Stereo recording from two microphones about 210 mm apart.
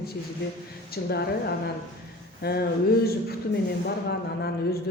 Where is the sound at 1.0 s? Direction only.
50° left (ahead or behind).